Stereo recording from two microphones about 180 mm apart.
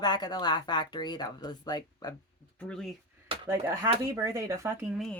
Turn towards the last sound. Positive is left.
turn(degrees=-15)  # may be behind; listen again after turning